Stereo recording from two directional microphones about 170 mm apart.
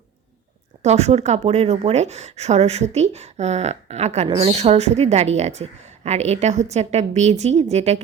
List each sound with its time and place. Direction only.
0.8 s a woman's voice: 40° right (ahead or behind)